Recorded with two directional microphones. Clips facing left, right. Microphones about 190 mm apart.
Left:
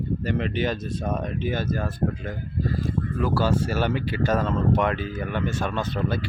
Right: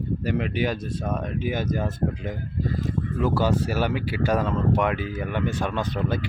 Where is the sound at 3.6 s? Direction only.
15° right (ahead or behind).